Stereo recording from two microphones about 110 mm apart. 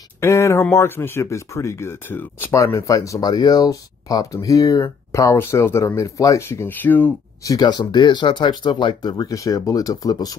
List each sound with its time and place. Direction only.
0.2 s speech: 25° left (ahead or behind)
7.4 s speech: 35° left (ahead or behind)